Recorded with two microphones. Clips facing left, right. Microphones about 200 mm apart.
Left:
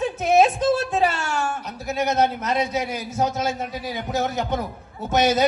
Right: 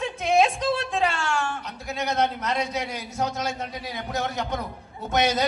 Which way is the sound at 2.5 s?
5° left (ahead or behind).